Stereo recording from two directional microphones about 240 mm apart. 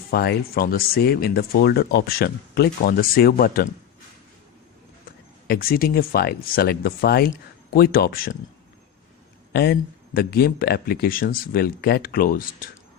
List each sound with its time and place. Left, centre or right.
0.1 s speech: left
5.5 s speech: left
9.5 s speech: left